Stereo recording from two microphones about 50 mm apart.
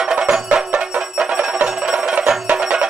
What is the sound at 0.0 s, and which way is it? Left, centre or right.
Music, centre.